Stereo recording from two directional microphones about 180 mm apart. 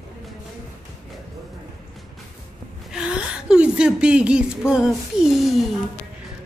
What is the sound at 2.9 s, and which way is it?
A woman's voice, 5° right (ahead or behind).